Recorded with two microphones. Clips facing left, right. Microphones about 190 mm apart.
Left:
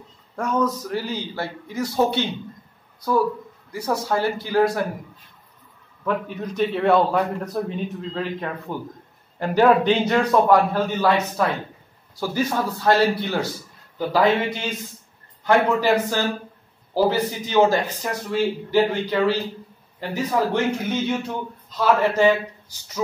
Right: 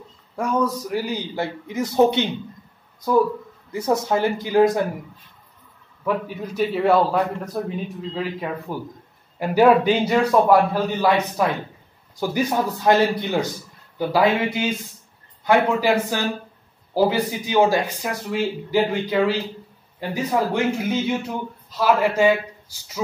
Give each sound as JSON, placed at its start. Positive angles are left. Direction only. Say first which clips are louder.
{"t": 0.4, "sound": "speech", "louder": "right 1 dB", "side_deg": -10}
{"t": 3.7, "sound": "speech", "louder": "right 3 dB", "side_deg": -20}
{"t": 6.0, "sound": "speech", "louder": "right 1 dB", "side_deg": -5}